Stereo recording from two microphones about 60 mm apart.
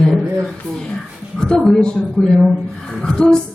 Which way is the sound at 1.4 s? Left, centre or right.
Centre.